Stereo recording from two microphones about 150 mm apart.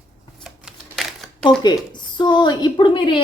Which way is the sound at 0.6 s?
Centre (ahead or behind).